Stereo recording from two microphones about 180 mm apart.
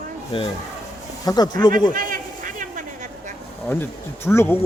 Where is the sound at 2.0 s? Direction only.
50° right (ahead or behind).